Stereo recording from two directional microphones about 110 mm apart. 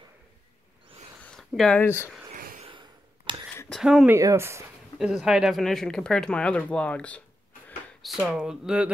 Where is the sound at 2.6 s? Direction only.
45° right (ahead or behind).